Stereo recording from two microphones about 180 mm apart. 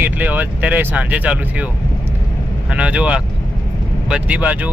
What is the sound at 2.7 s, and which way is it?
Speech, 5° right (ahead or behind).